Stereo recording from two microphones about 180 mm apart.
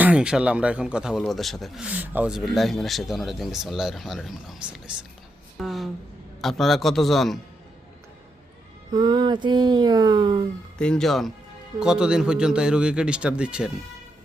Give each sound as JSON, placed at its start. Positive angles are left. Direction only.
{"t": 0.0, "sound": "speech", "side_deg": -5}
{"t": 8.9, "sound": "speech", "side_deg": -20}
{"t": 10.8, "sound": "speech", "side_deg": 5}